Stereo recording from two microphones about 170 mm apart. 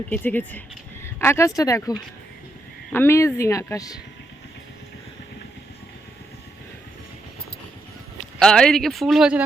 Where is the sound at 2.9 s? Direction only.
15° left (ahead or behind).